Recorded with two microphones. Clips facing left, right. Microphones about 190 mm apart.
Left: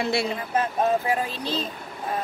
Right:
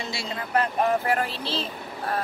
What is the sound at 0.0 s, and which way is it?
Speech, 60° left (ahead or behind).